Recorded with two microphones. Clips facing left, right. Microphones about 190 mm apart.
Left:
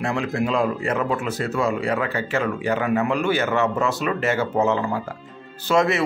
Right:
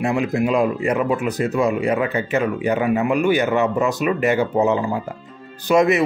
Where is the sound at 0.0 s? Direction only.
15° right (ahead or behind).